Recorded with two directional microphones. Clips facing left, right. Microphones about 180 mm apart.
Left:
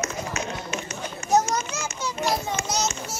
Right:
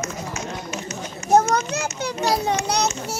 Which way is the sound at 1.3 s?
55° right (ahead or behind).